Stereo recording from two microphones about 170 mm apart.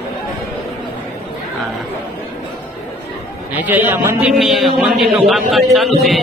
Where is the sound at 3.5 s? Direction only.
10° right (ahead or behind).